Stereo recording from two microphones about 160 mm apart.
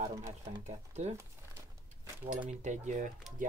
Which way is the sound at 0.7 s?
45° right (ahead or behind).